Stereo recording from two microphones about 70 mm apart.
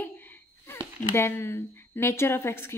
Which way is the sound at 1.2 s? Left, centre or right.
Left.